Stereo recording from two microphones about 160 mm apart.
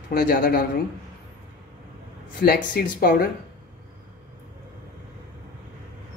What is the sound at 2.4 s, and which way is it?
Speech, 70° left (ahead or behind).